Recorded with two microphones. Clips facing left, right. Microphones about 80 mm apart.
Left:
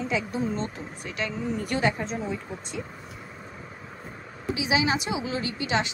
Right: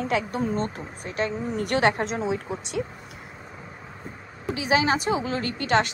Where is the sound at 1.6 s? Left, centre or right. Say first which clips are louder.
Right 5 dB; right.